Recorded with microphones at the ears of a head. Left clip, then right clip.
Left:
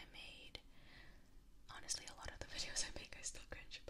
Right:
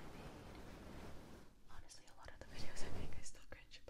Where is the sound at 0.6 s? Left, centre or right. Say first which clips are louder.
Right 7 dB; right.